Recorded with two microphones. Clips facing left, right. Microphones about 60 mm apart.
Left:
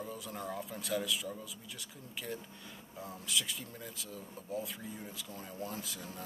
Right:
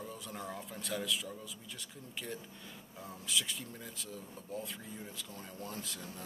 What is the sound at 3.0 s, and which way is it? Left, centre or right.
A man's voice, centre.